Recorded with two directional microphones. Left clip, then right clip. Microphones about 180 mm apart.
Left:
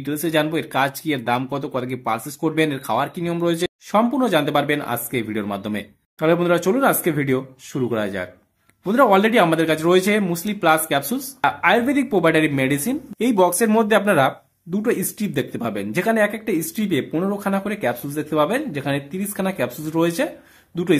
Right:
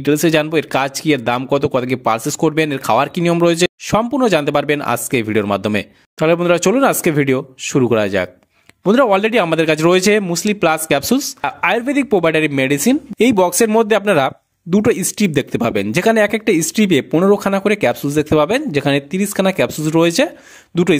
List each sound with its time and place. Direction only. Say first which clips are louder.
0.0 s speech: right 7 dB; 45° right (ahead or behind)